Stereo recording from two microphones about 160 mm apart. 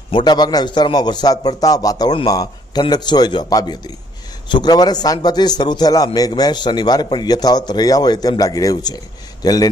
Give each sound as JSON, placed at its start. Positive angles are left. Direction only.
{"t": 0.1, "sound": "a man's voice", "side_deg": 25}